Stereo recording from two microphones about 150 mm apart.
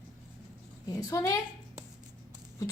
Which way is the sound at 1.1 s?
20° left (ahead or behind).